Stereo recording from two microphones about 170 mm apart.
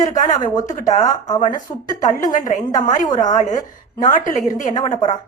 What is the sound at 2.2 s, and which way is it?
A woman's voice, 50° left (ahead or behind).